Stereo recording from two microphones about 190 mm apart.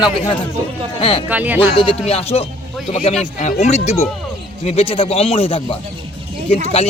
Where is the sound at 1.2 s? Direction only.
10° right (ahead or behind).